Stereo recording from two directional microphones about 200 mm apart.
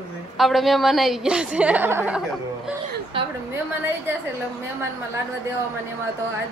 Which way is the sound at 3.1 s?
25° right (ahead or behind).